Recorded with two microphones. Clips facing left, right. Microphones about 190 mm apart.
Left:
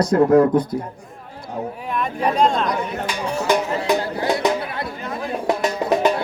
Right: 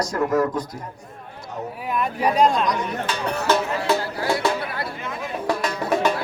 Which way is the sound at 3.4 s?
15° left (ahead or behind).